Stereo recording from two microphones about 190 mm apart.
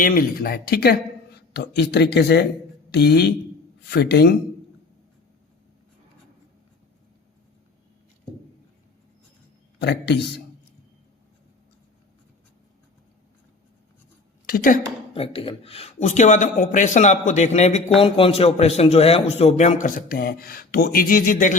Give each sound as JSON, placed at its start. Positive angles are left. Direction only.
{"t": 0.0, "sound": "a man's voice", "side_deg": 50}
{"t": 9.8, "sound": "a man's voice", "side_deg": 60}
{"t": 14.4, "sound": "a woman's voice", "side_deg": 50}
{"t": 15.1, "sound": "speech", "side_deg": 30}